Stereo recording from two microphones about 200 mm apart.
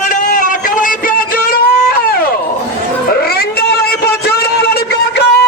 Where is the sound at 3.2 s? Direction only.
50° left (ahead or behind).